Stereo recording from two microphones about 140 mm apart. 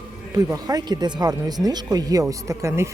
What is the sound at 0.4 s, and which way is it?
Speech, 25° right (ahead or behind).